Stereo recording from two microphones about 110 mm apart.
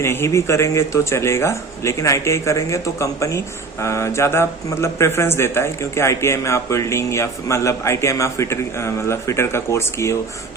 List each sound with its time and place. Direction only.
0.0 s speech: 25° left (ahead or behind)